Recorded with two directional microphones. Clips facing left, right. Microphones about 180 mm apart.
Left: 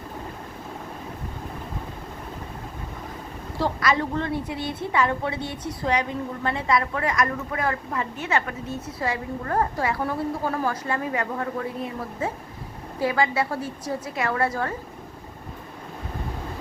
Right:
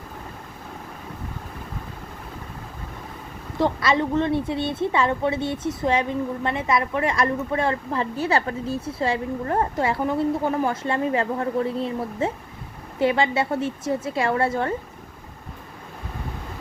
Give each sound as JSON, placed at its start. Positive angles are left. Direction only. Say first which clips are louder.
{"t": 3.6, "sound": "a woman's voice", "louder": "right 3 dB", "side_deg": -25}